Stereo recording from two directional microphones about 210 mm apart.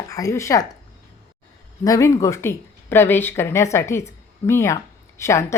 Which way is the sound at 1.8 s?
15° left (ahead or behind).